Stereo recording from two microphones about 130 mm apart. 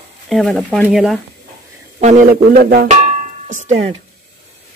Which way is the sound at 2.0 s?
75° right (ahead or behind).